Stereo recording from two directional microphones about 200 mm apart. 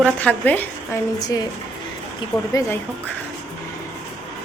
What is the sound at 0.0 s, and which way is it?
Speech, 5° left (ahead or behind).